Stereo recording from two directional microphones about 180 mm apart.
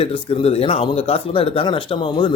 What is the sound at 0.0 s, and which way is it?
Speech, 35° left (ahead or behind).